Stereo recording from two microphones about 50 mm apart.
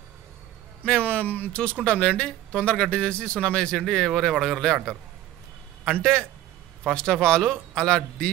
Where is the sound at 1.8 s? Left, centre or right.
Left.